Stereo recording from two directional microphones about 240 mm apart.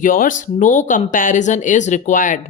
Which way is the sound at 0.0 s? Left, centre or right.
Left.